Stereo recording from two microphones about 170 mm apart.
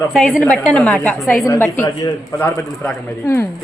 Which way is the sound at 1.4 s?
15° left (ahead or behind).